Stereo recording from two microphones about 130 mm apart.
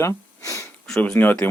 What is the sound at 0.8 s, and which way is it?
Speech, 5° left (ahead or behind).